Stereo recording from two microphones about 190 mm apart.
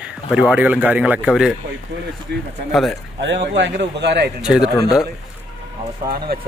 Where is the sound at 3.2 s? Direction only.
70° right (ahead or behind).